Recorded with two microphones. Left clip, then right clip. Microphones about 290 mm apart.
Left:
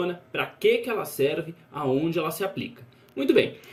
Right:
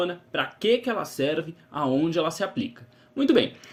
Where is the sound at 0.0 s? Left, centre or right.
Right.